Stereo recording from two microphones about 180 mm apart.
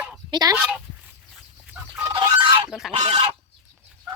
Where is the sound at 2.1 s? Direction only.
25° right (ahead or behind).